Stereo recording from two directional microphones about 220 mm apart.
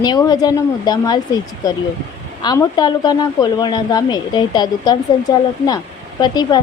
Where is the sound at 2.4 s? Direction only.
15° left (ahead or behind).